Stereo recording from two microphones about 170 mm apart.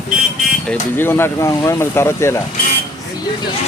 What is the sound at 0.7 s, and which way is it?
Speech, 10° left (ahead or behind).